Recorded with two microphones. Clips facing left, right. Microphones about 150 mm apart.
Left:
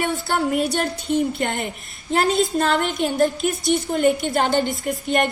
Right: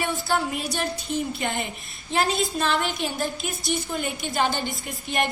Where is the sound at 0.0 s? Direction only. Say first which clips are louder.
Left 3 dB; 50° left (ahead or behind).